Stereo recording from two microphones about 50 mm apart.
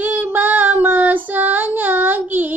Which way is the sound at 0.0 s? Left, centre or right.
Right.